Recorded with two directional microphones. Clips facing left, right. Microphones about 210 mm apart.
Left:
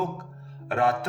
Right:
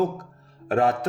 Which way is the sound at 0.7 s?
40° right (ahead or behind).